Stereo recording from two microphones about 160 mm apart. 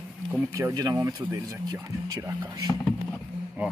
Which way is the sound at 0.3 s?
15° right (ahead or behind).